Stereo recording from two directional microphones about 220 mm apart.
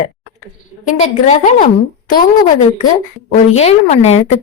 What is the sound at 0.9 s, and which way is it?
A woman's voice, 35° left (ahead or behind).